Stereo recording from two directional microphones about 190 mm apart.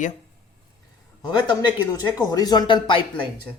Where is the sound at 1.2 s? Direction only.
25° left (ahead or behind).